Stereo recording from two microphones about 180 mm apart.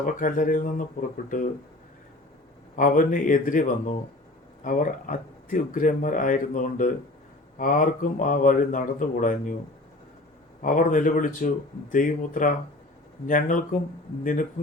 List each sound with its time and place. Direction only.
0.0 s speech: 45° left (ahead or behind)
2.7 s speech: 50° left (ahead or behind)
10.6 s speech: 50° left (ahead or behind)